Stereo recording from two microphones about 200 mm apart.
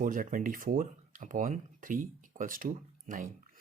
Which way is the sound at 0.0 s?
40° right (ahead or behind).